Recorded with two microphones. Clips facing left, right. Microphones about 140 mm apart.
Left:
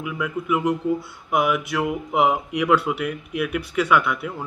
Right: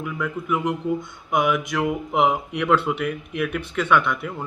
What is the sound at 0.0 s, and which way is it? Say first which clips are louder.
Speech: left 1 dB; 5° left (ahead or behind).